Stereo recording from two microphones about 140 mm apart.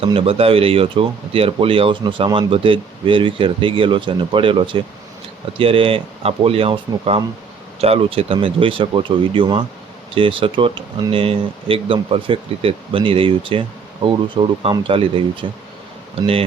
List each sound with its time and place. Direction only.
0.0 s speech: 40° right (ahead or behind)